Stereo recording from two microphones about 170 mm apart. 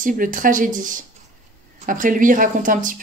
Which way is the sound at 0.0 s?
50° right (ahead or behind).